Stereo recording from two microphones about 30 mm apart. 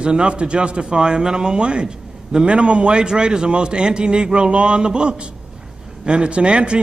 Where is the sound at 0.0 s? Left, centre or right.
Right.